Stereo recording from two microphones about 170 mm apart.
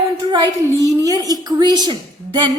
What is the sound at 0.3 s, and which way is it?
A woman's voice, 25° right (ahead or behind).